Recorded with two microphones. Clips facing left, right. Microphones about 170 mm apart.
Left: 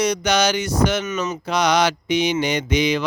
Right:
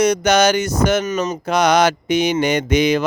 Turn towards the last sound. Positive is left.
turn(degrees=-50)  # may be behind; listen again after turning